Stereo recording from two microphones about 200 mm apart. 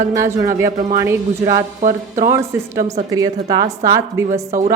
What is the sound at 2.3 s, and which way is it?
Speech, 15° right (ahead or behind).